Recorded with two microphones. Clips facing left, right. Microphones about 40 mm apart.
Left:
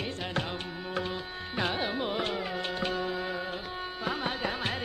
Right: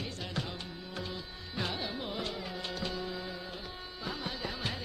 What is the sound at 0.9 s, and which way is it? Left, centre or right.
Music, left.